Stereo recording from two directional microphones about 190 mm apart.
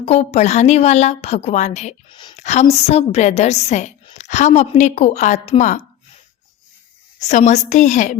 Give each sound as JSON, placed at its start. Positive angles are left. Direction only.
{"t": 0.0, "sound": "a woman's voice", "side_deg": 35}
{"t": 7.2, "sound": "a woman's voice", "side_deg": 40}